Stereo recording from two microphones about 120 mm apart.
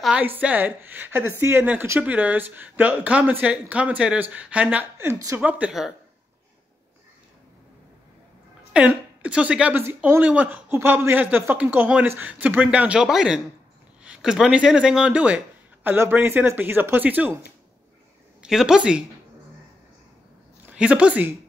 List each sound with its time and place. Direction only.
0.2 s speech: 15° right (ahead or behind)
4.9 s a woman's voice: 20° right (ahead or behind)
5.4 s speech: 10° right (ahead or behind)
8.7 s speech: 10° right (ahead or behind)
18.4 s speech: 5° right (ahead or behind)
20.7 s speech: 10° right (ahead or behind)